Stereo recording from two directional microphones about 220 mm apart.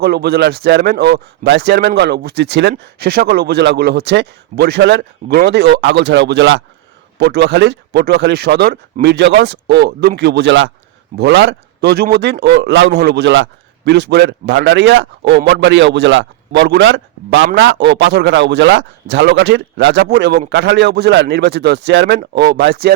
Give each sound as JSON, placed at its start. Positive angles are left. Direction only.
{"t": 0.0, "sound": "a man's voice", "side_deg": -45}